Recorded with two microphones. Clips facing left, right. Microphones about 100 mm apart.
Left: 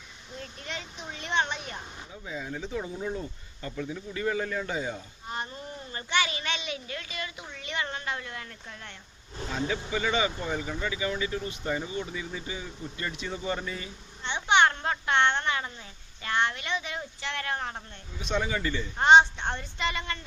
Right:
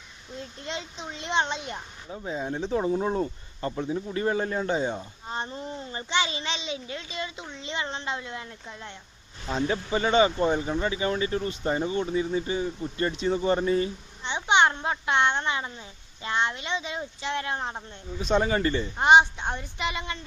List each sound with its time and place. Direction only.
0.6 s speech: 25° right (ahead or behind)
2.2 s speech: 35° right (ahead or behind); by 9.0 s 20° right (ahead or behind)
9.5 s speech: 35° right (ahead or behind)
14.3 s a woman's voice: 20° right (ahead or behind)
18.2 s speech: 35° right (ahead or behind)
18.9 s a woman's voice: 15° right (ahead or behind)